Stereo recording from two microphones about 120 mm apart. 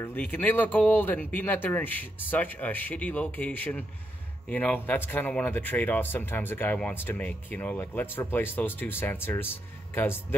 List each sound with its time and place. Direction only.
0.0 s speech: 15° left (ahead or behind)